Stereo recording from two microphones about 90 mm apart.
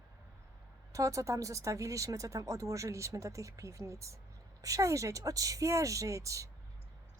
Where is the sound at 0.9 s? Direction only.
35° right (ahead or behind).